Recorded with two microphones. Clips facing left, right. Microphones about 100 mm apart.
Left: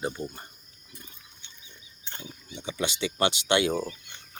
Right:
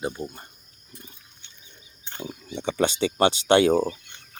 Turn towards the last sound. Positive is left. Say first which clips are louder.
# right 7 dB
turn(degrees=-40)  # may be behind; listen again after turning